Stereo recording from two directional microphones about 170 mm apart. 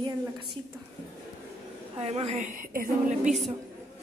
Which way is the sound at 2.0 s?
35° right (ahead or behind).